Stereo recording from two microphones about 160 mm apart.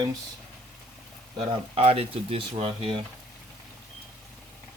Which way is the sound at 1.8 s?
35° right (ahead or behind).